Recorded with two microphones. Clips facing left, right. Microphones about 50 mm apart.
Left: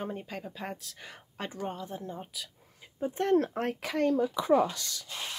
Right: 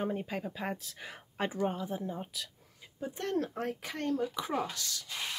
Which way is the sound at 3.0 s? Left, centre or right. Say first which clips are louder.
Left 8 dB; left.